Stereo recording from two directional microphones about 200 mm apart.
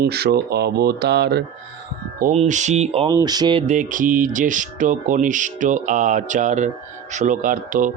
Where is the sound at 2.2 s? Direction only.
40° right (ahead or behind).